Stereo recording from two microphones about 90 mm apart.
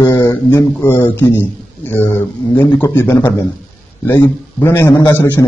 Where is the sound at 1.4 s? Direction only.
25° left (ahead or behind).